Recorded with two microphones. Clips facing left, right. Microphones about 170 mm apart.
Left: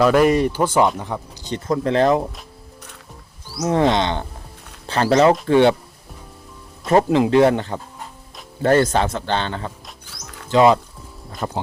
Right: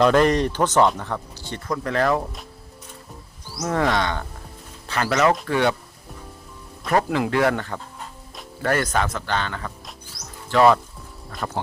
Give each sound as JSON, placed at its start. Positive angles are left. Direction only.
{"t": 0.0, "sound": "speech", "side_deg": 5}
{"t": 3.6, "sound": "a man's voice", "side_deg": 25}
{"t": 6.8, "sound": "a man's voice", "side_deg": 25}